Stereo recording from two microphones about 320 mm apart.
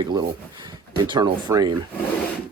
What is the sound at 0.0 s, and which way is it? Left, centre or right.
Speech, centre.